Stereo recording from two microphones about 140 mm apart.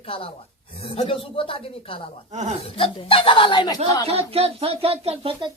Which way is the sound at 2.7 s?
40° left (ahead or behind).